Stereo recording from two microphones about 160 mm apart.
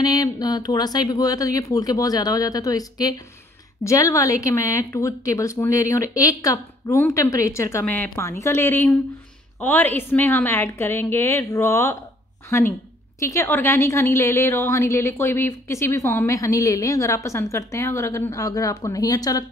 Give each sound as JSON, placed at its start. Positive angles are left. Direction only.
{"t": 0.0, "sound": "a woman's voice", "side_deg": 25}